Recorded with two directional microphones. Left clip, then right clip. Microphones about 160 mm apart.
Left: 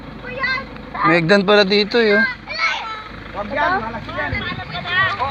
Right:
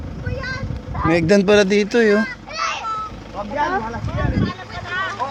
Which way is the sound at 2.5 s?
40° left (ahead or behind).